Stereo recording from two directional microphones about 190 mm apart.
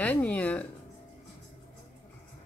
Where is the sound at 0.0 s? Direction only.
10° left (ahead or behind).